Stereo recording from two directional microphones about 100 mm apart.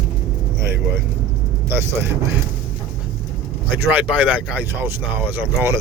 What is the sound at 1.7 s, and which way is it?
Speech, 25° right (ahead or behind).